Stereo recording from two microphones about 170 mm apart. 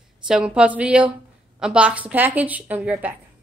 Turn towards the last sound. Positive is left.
turn(degrees=-10)  # may be behind; listen again after turning